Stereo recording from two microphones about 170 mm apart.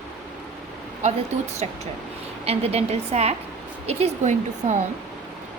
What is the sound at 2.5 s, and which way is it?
A woman's voice, 35° right (ahead or behind).